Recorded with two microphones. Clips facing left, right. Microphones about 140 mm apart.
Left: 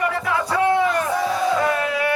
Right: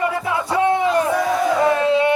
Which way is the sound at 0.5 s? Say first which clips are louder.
Right 2 dB; 20° right (ahead or behind).